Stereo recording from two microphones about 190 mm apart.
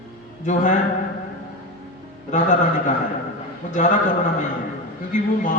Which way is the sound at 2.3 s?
40° left (ahead or behind).